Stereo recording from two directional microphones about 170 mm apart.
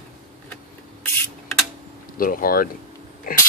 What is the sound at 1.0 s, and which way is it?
Printer, 10° left (ahead or behind).